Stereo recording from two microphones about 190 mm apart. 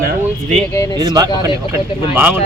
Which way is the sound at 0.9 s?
20° right (ahead or behind).